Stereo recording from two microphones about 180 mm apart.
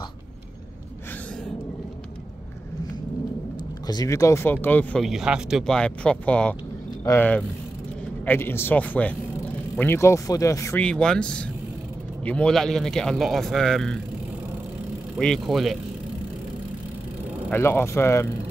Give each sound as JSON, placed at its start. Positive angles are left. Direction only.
{"t": 3.8, "sound": "a man's voice", "side_deg": 20}
{"t": 15.1, "sound": "a man's voice", "side_deg": 0}
{"t": 17.5, "sound": "speech", "side_deg": 15}